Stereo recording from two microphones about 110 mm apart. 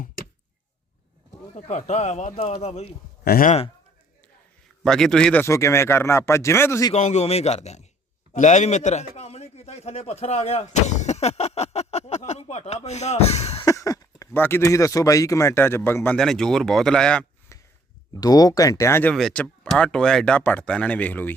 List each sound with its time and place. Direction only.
1.7 s a man's voice: 90° left
4.8 s speech: 5° left (ahead or behind)
5.4 s speech: 25° left (ahead or behind)
6.9 s a man's voice: 90° left
9.1 s a sound: 70° left (ahead or behind)
13.7 s a sound: 30° left (ahead or behind)
14.3 s speech: 20° left (ahead or behind)
16.1 s speech: 5° left (ahead or behind)
17.5 s a sound: 25° left (ahead or behind)
18.2 s speech: 35° left (ahead or behind)
19.1 s speech: centre (ahead or behind)